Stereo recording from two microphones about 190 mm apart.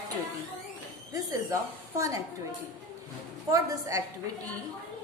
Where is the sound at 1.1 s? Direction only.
20° right (ahead or behind).